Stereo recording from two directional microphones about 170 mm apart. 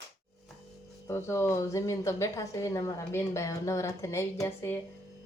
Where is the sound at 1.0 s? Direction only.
15° left (ahead or behind).